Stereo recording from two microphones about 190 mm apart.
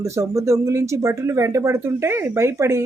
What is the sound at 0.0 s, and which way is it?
A woman's voice, 15° right (ahead or behind).